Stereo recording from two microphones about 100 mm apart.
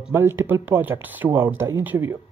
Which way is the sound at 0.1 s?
25° right (ahead or behind).